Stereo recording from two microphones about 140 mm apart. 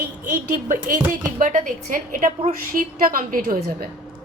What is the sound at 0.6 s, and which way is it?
A woman's voice, 65° right (ahead or behind).